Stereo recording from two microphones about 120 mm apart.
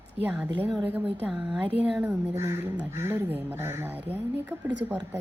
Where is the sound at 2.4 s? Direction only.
20° right (ahead or behind).